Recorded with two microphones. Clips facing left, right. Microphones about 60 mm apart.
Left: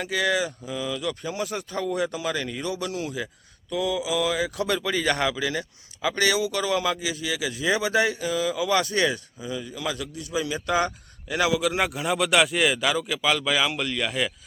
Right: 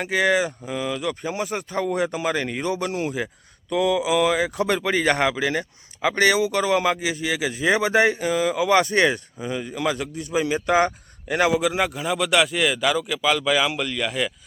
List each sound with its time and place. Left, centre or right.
0.0 s speech: right
0.7 s speech: right
3.7 s mantra: right
4.4 s speech: right
11.6 s speech: centre